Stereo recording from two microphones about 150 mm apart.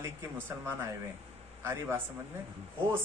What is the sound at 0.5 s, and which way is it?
A man's voice, 15° right (ahead or behind).